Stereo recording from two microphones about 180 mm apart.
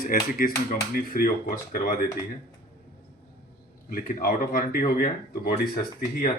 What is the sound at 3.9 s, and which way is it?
Speech, 50° left (ahead or behind).